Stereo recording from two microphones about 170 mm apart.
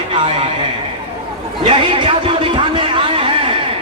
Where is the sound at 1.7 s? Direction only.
30° right (ahead or behind).